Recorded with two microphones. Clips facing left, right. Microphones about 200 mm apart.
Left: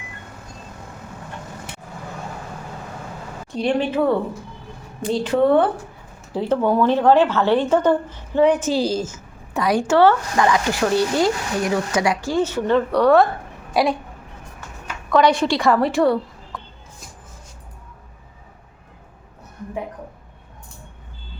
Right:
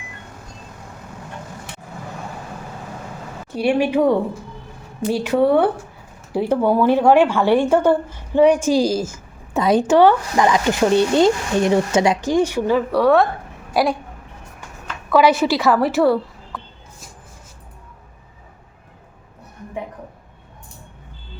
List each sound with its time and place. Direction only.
3.5 s a woman's voice: 10° right (ahead or behind)
9.6 s speech: 20° right (ahead or behind); by 13.2 s centre (ahead or behind)
13.7 s a sound: centre (ahead or behind)
15.1 s a woman's voice: 5° right (ahead or behind)